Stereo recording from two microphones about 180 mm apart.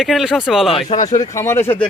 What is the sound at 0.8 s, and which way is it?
Speech, 35° left (ahead or behind).